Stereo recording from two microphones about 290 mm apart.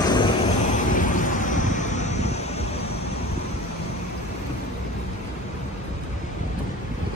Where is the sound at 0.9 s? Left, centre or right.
Left.